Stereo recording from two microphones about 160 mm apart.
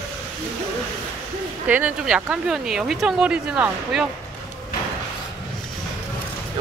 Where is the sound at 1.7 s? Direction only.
10° right (ahead or behind).